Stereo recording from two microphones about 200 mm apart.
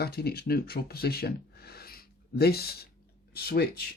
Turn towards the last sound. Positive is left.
turn(degrees=50)  # may be behind; listen again after turning